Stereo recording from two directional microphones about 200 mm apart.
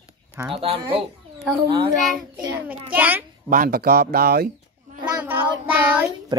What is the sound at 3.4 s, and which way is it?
Speech, 45° right (ahead or behind).